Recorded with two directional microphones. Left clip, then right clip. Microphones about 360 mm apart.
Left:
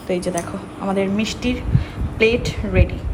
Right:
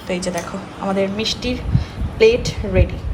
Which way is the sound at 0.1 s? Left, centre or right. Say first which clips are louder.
Left 1 dB; centre.